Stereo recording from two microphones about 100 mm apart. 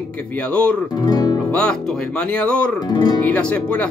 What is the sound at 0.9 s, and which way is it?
Speech, 40° left (ahead or behind).